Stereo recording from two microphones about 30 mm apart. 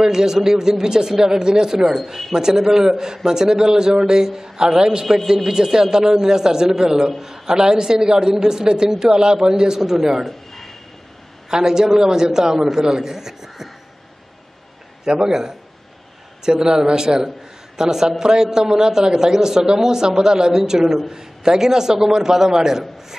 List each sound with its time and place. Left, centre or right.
0.0 s a man's voice: centre
5.0 s a man's voice: centre
5.5 s a man's voice: right
10.5 s a sound: centre
11.5 s a man's voice: right
15.0 s a man's voice: centre